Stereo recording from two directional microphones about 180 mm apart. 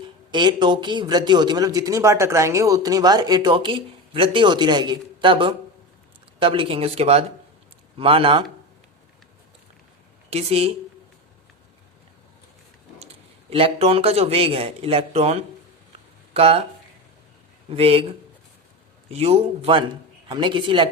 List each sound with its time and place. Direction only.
0.3 s speech: 25° right (ahead or behind)
10.2 s speech: 35° right (ahead or behind)
13.5 s speech: 30° right (ahead or behind)
17.7 s speech: 30° right (ahead or behind)
19.1 s speech: 35° right (ahead or behind)